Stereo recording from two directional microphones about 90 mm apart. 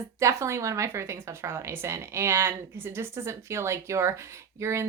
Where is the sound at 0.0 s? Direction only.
35° right (ahead or behind).